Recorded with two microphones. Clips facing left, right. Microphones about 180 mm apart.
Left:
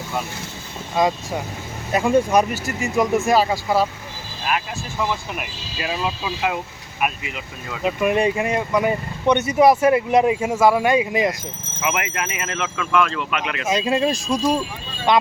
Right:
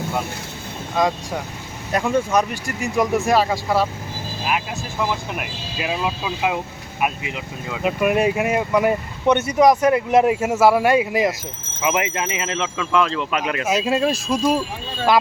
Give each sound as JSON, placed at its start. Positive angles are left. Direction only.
{"t": 0.9, "sound": "speech", "side_deg": 0}
{"t": 4.4, "sound": "speech", "side_deg": -10}
{"t": 7.8, "sound": "speech", "side_deg": -5}
{"t": 11.8, "sound": "speech", "side_deg": -25}
{"t": 13.7, "sound": "speech", "side_deg": -5}